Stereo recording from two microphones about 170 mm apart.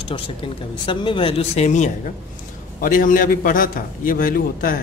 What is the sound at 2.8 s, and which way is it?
A man's voice, 55° left (ahead or behind).